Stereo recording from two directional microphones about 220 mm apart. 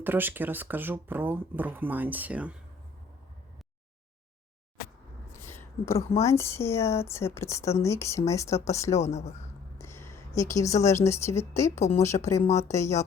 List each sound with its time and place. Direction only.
0.0 s speech: 10° right (ahead or behind)
5.5 s a sound: 10° left (ahead or behind)
6.1 s a woman's voice: 10° left (ahead or behind)
9.0 s speech: 30° left (ahead or behind)
9.7 s a sound: 10° left (ahead or behind)
10.8 s a woman's voice: 15° left (ahead or behind)
11.8 s speech: 30° left (ahead or behind)
12.0 s a woman's voice: 15° left (ahead or behind)